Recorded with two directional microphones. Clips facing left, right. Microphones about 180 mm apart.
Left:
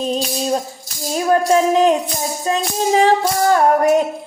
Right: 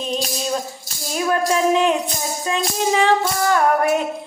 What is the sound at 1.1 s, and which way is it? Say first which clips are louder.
Music: left 5 dB; 35° left (ahead or behind).